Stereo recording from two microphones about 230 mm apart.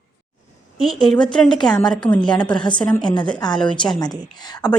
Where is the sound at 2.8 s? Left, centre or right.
Centre.